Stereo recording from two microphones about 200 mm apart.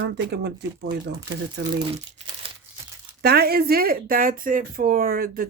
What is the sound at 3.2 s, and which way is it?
Speech, 50° right (ahead or behind).